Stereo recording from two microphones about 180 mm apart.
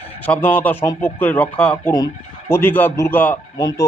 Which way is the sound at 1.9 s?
15° left (ahead or behind).